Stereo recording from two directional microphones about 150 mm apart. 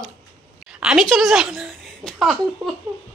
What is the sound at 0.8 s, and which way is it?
A woman's voice, 5° right (ahead or behind).